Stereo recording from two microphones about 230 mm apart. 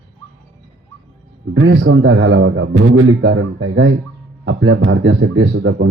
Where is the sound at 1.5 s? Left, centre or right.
Right.